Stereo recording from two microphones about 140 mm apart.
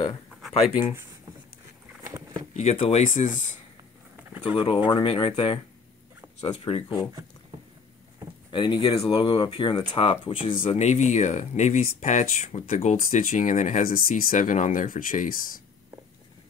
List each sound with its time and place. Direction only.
2.5 s speech: 55° left (ahead or behind)
4.4 s speech: 35° left (ahead or behind)
6.6 s speech: 40° left (ahead or behind)
8.5 s speech: 35° left (ahead or behind)
10.7 s speech: 55° left (ahead or behind); by 15.6 s 85° left